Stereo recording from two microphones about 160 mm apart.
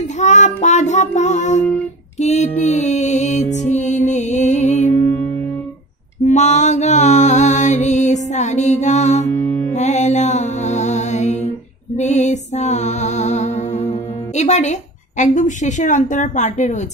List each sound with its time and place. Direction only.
0.2 s a woman's voice: 45° left (ahead or behind)
2.1 s music: 45° left (ahead or behind)
6.2 s mantra: 45° left (ahead or behind)
9.3 s music: 15° left (ahead or behind)
9.8 s music: 45° left (ahead or behind)
14.3 s a woman's voice: 45° left (ahead or behind)